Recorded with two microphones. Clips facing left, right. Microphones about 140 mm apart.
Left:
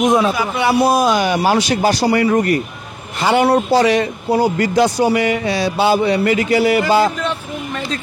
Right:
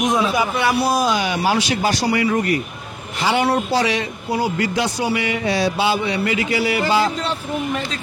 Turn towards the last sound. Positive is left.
turn(degrees=45)  # may be behind; listen again after turning